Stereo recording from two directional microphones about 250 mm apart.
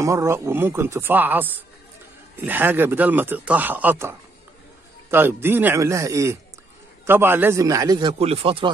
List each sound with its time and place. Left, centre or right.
0.0 s speech: centre